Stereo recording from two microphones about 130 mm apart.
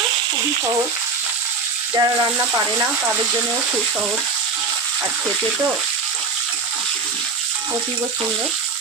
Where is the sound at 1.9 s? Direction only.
20° right (ahead or behind).